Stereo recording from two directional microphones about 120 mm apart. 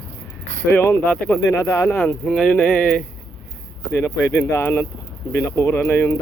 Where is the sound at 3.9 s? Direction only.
20° left (ahead or behind).